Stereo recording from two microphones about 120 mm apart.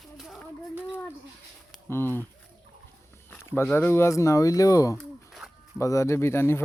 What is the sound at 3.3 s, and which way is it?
Speech, 15° left (ahead or behind).